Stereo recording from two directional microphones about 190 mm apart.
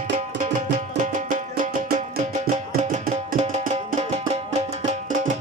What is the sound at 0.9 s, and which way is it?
Music, 45° right (ahead or behind).